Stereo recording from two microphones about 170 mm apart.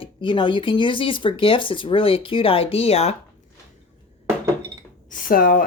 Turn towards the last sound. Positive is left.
turn(degrees=55)  # may be behind; listen again after turning